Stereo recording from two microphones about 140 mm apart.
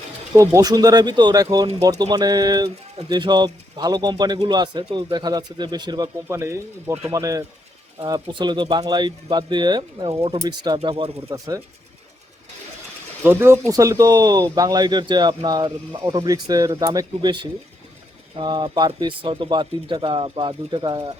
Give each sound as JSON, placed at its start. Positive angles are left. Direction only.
{"t": 0.3, "sound": "speech", "side_deg": -25}
{"t": 6.2, "sound": "speech", "side_deg": -20}
{"t": 10.8, "sound": "speech", "side_deg": -40}
{"t": 11.3, "sound": "speech", "side_deg": -25}
{"t": 13.2, "sound": "speech", "side_deg": -20}